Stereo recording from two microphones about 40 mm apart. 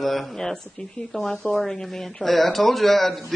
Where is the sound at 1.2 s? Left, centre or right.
Left.